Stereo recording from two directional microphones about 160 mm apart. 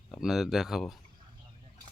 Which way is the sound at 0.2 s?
Centre (ahead or behind).